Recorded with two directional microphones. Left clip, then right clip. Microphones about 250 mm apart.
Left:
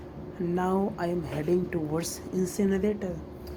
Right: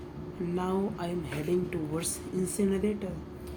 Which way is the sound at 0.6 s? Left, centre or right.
Centre.